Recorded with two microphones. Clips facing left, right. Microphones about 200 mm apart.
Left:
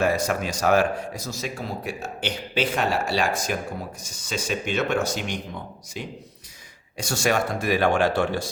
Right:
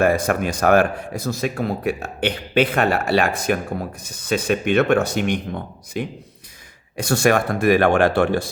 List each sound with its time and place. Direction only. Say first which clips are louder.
0.0 s a man's voice: right 5 dB; 55° right (ahead or behind)